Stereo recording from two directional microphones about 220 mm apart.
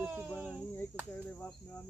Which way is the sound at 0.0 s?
10° right (ahead or behind).